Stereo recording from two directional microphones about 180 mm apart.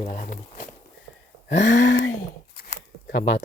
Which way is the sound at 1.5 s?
90° left.